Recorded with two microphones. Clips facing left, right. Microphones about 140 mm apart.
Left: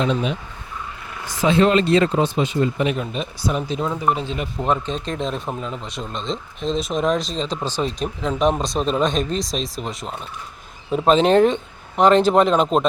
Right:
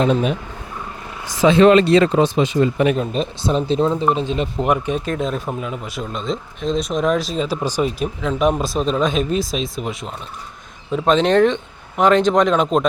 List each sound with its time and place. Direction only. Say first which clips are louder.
0.0 s speech: right 4 dB; 50° right (ahead or behind)
1.4 s speech: right 5 dB; 90° right
2.9 s speech: right 5 dB; 35° right (ahead or behind); by 12.8 s centre (ahead or behind)